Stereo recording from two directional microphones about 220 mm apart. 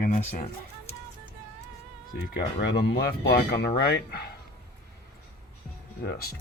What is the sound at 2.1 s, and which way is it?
Speech, 45° left (ahead or behind).